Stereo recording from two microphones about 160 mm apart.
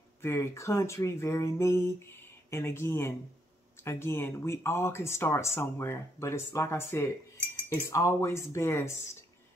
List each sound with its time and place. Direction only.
0.2 s speech: 15° left (ahead or behind)